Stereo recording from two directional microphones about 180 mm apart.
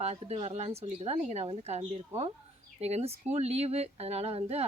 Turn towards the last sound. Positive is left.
turn(degrees=-35)  # may be behind; listen again after turning